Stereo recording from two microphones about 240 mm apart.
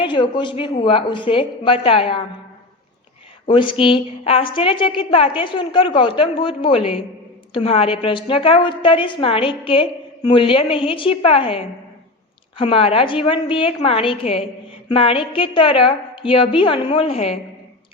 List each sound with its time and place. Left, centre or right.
0.0 s a woman's voice: centre
3.4 s a woman's voice: left
14.8 s a sound: left
15.3 s a woman's voice: left